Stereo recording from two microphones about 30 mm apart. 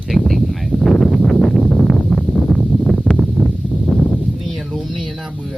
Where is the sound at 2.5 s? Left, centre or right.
Left.